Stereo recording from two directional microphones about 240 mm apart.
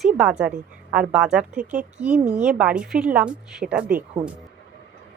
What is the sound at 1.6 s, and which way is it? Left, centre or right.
Speech, right.